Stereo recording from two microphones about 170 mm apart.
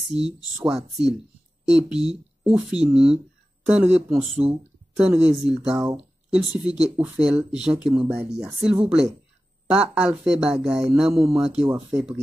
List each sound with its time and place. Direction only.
0.6 s speech: 5° right (ahead or behind)